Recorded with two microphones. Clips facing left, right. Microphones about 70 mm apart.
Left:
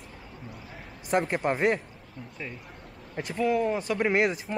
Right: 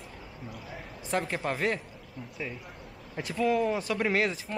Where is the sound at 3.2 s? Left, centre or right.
Centre.